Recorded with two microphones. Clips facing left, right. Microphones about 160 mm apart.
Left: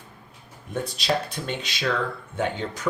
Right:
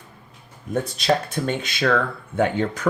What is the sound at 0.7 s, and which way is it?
Speech, 50° right (ahead or behind).